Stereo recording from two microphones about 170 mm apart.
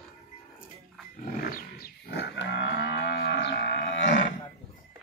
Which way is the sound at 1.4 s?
60° left (ahead or behind).